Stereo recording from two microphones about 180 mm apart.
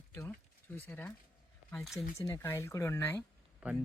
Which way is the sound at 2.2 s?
10° left (ahead or behind).